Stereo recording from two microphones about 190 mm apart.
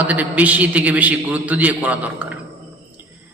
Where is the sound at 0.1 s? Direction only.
10° right (ahead or behind).